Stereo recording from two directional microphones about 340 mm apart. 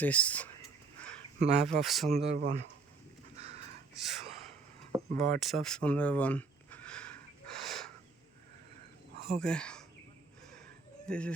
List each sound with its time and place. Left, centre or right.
0.0 s speech: centre
1.4 s speech: centre
1.8 s speech: centre
2.1 s speech: centre
3.3 s a sound: centre
3.9 s speech: centre
4.9 s a sound: centre
9.3 s speech: centre
11.0 s speech: centre